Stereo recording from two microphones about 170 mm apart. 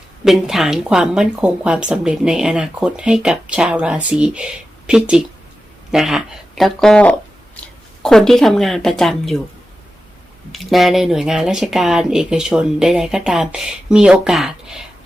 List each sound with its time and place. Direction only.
0.3 s speech: centre (ahead or behind)
10.5 s speech: centre (ahead or behind)